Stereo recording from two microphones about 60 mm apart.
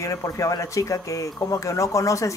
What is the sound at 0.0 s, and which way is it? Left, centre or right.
Speech, left.